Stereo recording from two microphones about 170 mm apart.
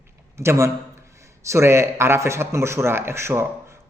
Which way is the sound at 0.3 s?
15° right (ahead or behind).